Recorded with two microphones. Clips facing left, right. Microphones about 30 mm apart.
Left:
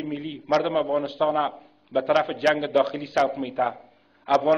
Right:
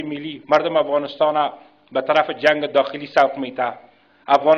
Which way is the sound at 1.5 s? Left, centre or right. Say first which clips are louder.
Right 2 dB; right.